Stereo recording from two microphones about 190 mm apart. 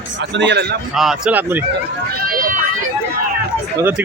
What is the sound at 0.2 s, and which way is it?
Speech, 65° right (ahead or behind).